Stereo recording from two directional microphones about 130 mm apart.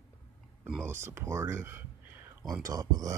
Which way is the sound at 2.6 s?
30° right (ahead or behind).